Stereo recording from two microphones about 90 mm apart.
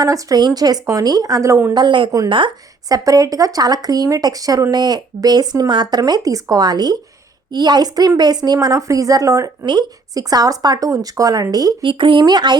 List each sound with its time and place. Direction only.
0.0 s a woman's voice: 40° right (ahead or behind)
1.7 s speech: 60° right (ahead or behind)
2.9 s a woman's voice: 40° right (ahead or behind)
9.6 s speech: 50° right (ahead or behind)
11.8 s speech: 70° right (ahead or behind)
12.2 s speech: 55° right (ahead or behind)